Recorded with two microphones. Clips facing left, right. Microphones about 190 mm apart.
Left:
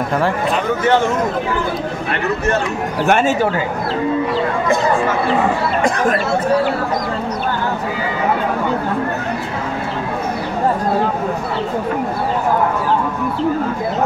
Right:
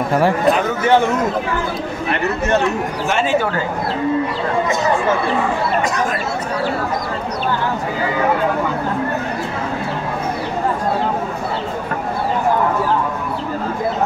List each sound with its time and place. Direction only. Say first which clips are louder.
3.1 s speech: left 5 dB; 55° left (ahead or behind)